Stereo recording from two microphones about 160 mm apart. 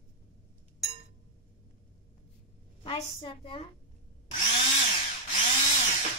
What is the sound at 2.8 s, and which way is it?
Speech, 30° left (ahead or behind).